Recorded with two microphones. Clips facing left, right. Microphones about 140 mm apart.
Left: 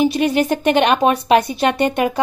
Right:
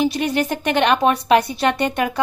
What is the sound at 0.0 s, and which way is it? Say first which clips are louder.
Speech: left 4 dB; 20° left (ahead or behind).